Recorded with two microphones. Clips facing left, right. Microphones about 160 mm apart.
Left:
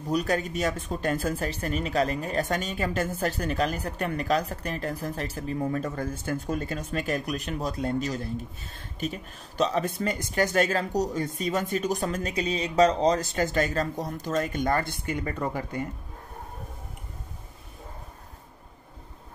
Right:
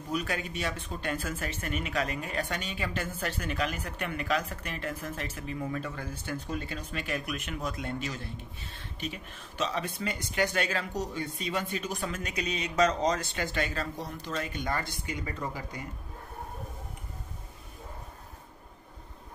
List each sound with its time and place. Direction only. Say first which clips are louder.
0.1 s speech: left 7 dB; 40° left (ahead or behind)